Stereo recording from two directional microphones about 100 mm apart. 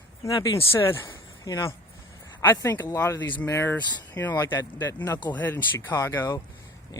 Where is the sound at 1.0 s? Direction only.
50° left (ahead or behind).